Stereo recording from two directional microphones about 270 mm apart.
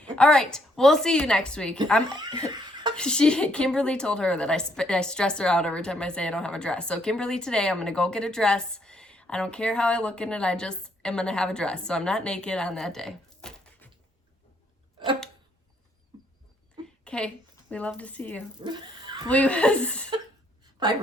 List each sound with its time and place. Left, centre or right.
0.0 s a woman's voice: centre
2.0 s speech: centre
2.5 s chuckle: centre
2.9 s a woman's voice: centre
17.0 s a woman's voice: centre
18.6 s speech: centre
19.3 s a woman's voice: centre
20.8 s a woman's voice: centre